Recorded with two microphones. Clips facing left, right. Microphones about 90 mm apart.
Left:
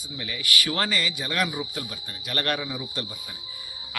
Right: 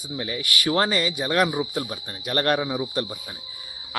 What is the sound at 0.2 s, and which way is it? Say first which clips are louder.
Speech: right 1 dB; 35° right (ahead or behind).